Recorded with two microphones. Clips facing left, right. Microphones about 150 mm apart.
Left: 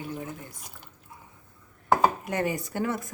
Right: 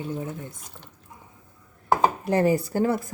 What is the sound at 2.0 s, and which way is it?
Speech, 35° right (ahead or behind).